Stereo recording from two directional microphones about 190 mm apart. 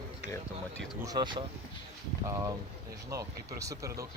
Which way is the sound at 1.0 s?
20° right (ahead or behind).